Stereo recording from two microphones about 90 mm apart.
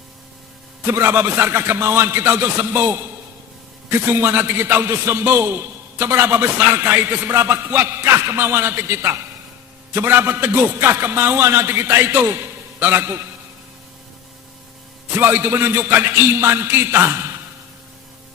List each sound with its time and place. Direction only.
0.9 s a man's voice: 25° right (ahead or behind)
15.1 s a man's voice: 25° right (ahead or behind)